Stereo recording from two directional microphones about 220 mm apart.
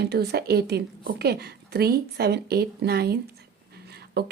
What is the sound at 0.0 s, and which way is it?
A woman's voice, 45° right (ahead or behind).